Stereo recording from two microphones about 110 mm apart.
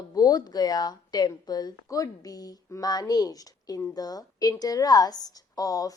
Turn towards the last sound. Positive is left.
turn(degrees=35)  # may be behind; listen again after turning